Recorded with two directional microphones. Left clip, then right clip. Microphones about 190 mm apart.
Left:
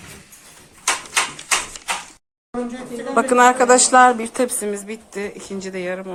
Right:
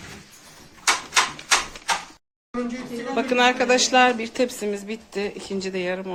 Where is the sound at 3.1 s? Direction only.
20° left (ahead or behind).